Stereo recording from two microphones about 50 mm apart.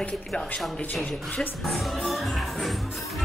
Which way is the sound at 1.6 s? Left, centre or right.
Centre.